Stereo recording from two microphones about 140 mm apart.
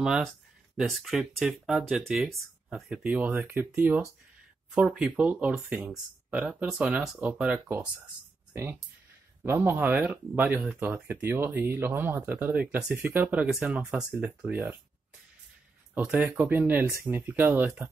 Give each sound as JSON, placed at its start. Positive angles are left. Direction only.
{"t": 0.0, "sound": "speech", "side_deg": -5}
{"t": 9.4, "sound": "speech", "side_deg": -15}
{"t": 15.9, "sound": "speech", "side_deg": -10}